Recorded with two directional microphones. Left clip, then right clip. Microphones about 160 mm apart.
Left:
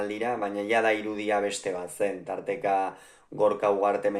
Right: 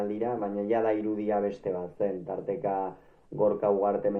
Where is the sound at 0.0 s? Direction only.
25° left (ahead or behind).